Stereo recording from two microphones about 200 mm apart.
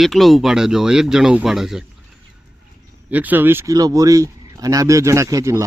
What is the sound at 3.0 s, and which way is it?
Speech, 10° right (ahead or behind).